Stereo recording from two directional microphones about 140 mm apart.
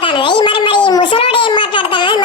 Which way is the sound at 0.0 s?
35° left (ahead or behind).